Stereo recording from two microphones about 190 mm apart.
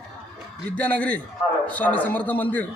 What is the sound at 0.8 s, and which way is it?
A man's voice, 10° left (ahead or behind).